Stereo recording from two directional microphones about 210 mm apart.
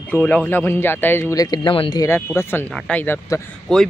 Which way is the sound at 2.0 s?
10° left (ahead or behind).